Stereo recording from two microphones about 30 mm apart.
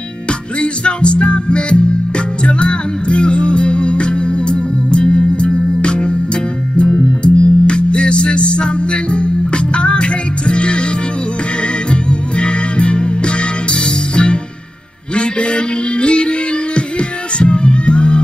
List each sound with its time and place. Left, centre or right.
0.3 s music: left
11.9 s music: left